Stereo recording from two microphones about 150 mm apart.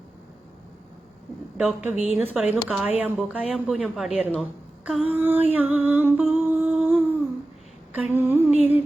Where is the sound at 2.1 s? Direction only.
10° right (ahead or behind).